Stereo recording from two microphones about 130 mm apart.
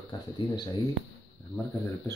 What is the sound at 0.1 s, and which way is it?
Speech, 40° left (ahead or behind).